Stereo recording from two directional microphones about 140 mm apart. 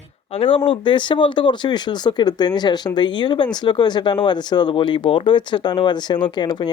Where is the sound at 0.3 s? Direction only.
40° left (ahead or behind).